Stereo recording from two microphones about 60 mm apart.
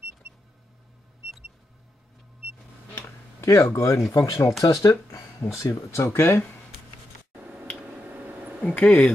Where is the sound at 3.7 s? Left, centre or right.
Left.